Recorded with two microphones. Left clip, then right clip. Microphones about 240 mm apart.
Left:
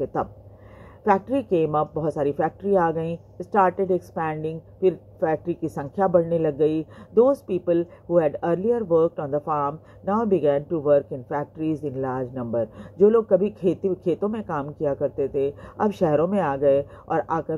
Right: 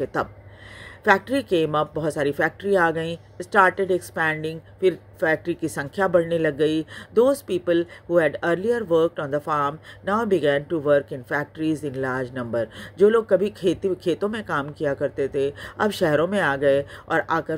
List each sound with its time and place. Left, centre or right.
0.0 s speech: right